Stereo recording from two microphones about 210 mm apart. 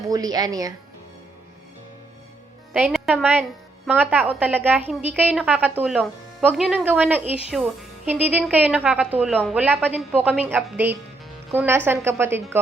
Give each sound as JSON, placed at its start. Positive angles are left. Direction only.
{"t": 0.1, "sound": "a woman's voice", "side_deg": -20}
{"t": 2.7, "sound": "a woman's voice", "side_deg": -5}